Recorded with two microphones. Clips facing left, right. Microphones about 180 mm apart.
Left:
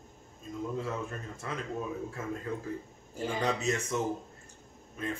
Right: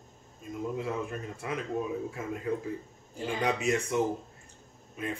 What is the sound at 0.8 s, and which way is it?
Speech, 15° right (ahead or behind).